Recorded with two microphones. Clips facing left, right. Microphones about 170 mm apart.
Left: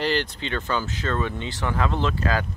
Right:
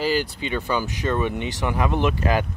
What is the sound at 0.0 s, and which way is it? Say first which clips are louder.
Speech: right 2 dB; 10° right (ahead or behind).